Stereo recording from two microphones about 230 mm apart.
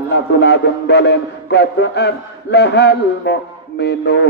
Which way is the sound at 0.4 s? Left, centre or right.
Left.